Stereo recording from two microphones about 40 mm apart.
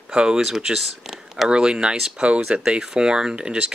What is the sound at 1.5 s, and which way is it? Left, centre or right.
Speech, right.